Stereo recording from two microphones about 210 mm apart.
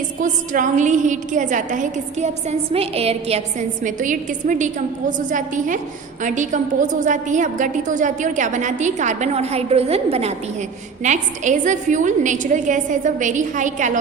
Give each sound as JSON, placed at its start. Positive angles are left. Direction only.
{"t": 0.2, "sound": "a woman's voice", "side_deg": -40}